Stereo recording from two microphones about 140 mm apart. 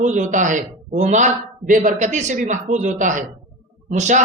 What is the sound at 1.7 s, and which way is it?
A man's voice, 70° right (ahead or behind).